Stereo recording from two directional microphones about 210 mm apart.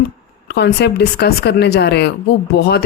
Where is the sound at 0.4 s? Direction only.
55° left (ahead or behind).